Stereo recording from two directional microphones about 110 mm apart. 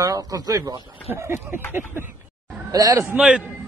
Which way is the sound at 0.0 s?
30° right (ahead or behind).